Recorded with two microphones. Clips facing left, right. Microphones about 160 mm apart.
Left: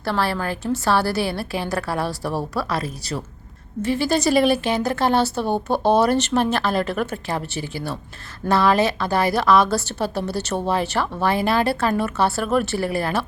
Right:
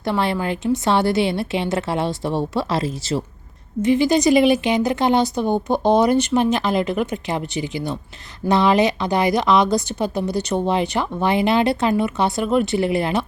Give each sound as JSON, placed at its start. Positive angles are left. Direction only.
{"t": 0.0, "sound": "a woman's voice", "side_deg": -20}
{"t": 3.8, "sound": "a woman's voice", "side_deg": -15}